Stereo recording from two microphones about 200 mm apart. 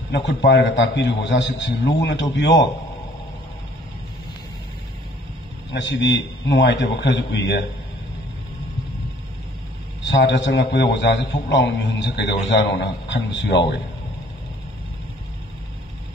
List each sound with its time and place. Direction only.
0.1 s a man's voice: 60° left (ahead or behind)
5.7 s a man's voice: 65° left (ahead or behind)
10.0 s a man's voice: 65° left (ahead or behind)